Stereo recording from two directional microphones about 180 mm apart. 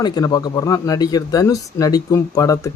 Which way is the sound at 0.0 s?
20° left (ahead or behind).